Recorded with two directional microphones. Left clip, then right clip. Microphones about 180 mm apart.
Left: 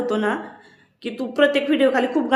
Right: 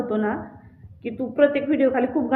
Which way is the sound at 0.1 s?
35° left (ahead or behind).